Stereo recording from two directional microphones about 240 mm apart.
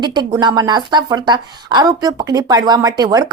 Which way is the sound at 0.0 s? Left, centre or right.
Centre.